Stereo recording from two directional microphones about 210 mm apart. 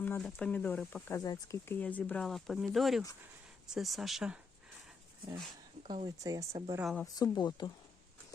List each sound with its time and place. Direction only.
0.0 s speech: 5° left (ahead or behind)
5.9 s speech: 20° right (ahead or behind)
6.8 s speech: centre (ahead or behind)
7.2 s speech: 20° left (ahead or behind)